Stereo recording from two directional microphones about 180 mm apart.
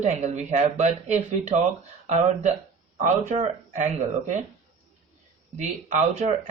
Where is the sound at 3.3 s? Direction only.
40° right (ahead or behind).